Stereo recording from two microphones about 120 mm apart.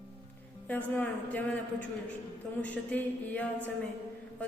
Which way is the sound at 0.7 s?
15° left (ahead or behind).